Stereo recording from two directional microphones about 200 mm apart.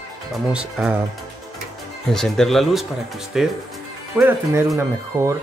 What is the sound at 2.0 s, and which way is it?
Speech, centre (ahead or behind).